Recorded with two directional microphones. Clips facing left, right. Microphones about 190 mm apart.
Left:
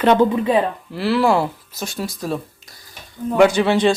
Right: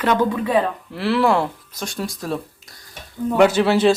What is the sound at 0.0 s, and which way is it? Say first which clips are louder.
Speech: left 4 dB; 25° left (ahead or behind).